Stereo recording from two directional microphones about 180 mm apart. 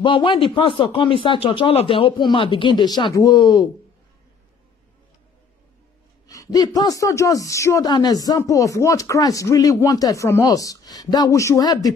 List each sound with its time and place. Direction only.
0.0 s a man's voice: 25° left (ahead or behind)
6.2 s a man's voice: 20° left (ahead or behind)